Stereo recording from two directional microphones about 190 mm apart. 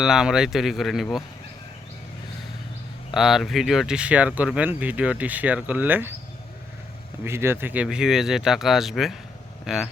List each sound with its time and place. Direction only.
0.0 s speech: 5° right (ahead or behind)
3.1 s speech: centre (ahead or behind)
7.3 s speech: 15° right (ahead or behind)